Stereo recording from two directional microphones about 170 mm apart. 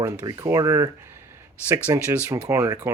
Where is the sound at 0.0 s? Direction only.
15° right (ahead or behind).